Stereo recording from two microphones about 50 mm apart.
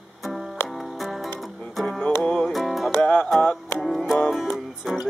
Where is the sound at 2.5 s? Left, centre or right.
Centre.